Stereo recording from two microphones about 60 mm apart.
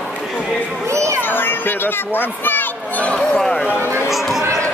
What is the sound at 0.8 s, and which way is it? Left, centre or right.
Children playing, right.